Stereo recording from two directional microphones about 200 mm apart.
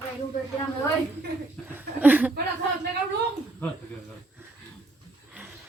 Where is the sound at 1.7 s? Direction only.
10° right (ahead or behind).